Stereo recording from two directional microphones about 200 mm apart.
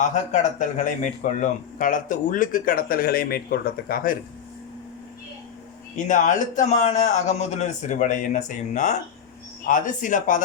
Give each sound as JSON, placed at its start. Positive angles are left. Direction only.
{"t": 0.0, "sound": "speech", "side_deg": 35}
{"t": 6.1, "sound": "a man's voice", "side_deg": 40}